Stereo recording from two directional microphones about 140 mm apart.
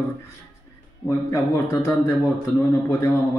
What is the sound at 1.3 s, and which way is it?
Speech, 25° left (ahead or behind).